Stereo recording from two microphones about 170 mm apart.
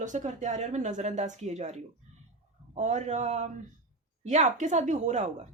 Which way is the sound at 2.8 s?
45° right (ahead or behind).